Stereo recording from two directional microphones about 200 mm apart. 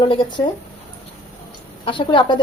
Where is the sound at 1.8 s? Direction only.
25° left (ahead or behind).